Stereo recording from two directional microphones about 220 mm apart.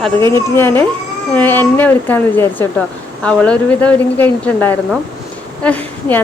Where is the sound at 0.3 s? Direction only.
10° left (ahead or behind).